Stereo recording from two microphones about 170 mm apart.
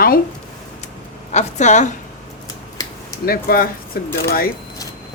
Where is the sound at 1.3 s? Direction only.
45° left (ahead or behind).